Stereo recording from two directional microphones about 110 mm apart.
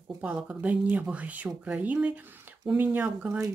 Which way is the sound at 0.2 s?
10° right (ahead or behind).